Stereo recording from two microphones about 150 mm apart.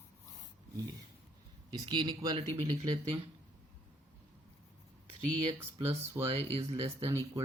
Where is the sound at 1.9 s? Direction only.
30° right (ahead or behind).